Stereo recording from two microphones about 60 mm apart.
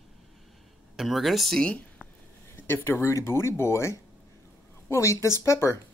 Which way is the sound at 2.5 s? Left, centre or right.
Left.